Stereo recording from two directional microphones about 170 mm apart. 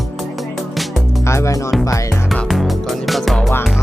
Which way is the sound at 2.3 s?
Centre (ahead or behind).